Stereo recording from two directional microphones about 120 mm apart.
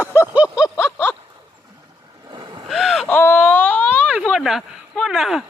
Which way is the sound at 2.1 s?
35° right (ahead or behind).